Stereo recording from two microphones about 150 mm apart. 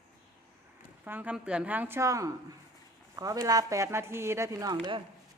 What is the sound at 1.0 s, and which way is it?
A woman's voice, 10° right (ahead or behind).